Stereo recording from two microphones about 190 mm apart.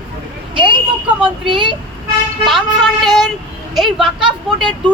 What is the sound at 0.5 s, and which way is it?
Speech, 25° right (ahead or behind).